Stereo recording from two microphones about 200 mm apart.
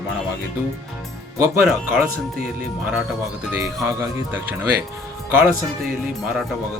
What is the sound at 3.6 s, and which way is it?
Speech, 15° right (ahead or behind).